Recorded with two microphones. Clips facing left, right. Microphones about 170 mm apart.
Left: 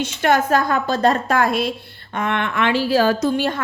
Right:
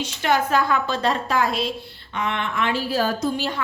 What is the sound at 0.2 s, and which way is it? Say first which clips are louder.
A woman's voice: left 3 dB; 45° left (ahead or behind).